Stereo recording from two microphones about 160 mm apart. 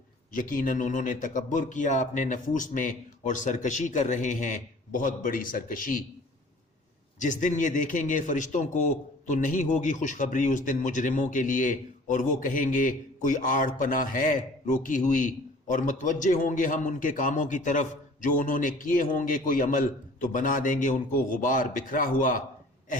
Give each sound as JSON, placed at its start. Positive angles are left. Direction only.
{"t": 0.3, "sound": "a man's voice", "side_deg": 60}
{"t": 7.2, "sound": "a man's voice", "side_deg": 50}